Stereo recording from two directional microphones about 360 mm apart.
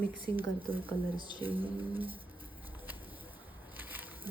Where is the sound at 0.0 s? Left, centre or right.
Centre.